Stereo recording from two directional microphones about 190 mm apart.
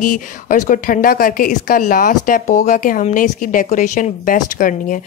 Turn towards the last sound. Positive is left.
turn(degrees=45)  # may be behind; listen again after turning